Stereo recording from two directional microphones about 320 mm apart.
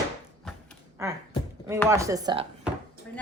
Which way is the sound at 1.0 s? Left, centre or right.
Centre.